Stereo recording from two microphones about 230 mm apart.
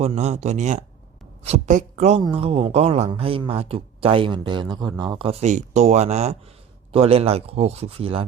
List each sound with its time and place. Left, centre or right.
0.0 s speech: right